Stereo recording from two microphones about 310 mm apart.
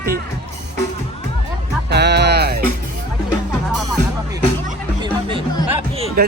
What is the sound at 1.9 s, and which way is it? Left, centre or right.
Music, right.